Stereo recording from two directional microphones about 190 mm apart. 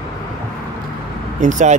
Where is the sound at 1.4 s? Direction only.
40° right (ahead or behind).